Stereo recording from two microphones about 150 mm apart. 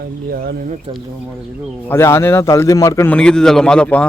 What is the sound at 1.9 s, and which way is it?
A man's voice, 15° left (ahead or behind).